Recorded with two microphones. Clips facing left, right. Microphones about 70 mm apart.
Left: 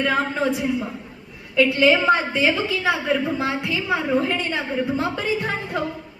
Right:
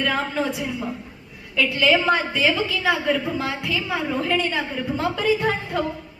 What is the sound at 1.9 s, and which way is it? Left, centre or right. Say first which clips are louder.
A woman's voice: left 1 dB; centre.